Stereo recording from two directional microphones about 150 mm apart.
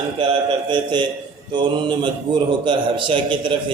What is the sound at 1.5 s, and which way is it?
A man's voice, 30° right (ahead or behind).